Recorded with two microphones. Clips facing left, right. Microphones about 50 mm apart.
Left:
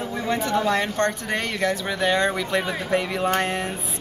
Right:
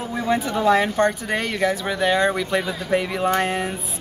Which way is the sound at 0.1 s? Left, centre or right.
Centre.